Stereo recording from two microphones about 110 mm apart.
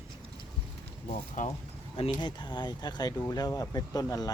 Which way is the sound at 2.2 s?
40° left (ahead or behind).